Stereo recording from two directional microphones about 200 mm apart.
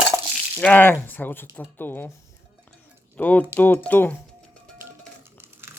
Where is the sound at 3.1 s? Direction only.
10° left (ahead or behind).